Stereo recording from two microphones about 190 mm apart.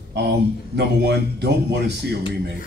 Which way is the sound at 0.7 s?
60° right (ahead or behind).